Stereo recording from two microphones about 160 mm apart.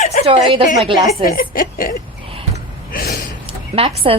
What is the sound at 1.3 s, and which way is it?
Speech, 65° left (ahead or behind).